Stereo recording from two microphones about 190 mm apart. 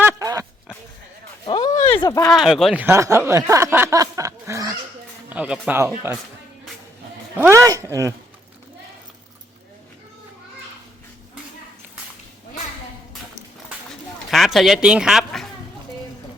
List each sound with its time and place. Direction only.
0.0 s a sound: 15° right (ahead or behind)
1.5 s a sound: 20° left (ahead or behind)
2.2 s speech: centre (ahead or behind)
2.8 s speech: 15° right (ahead or behind)
7.3 s speech: 15° right (ahead or behind)
14.3 s speech: centre (ahead or behind)